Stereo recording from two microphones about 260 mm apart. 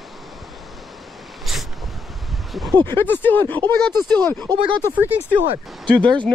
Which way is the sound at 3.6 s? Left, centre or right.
Centre.